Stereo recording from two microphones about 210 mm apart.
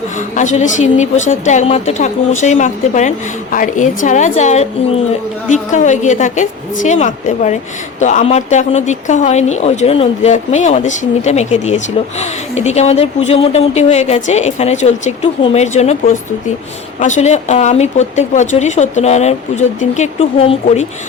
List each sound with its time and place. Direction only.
0.3 s speech: 35° left (ahead or behind)
17.0 s speech: 35° left (ahead or behind)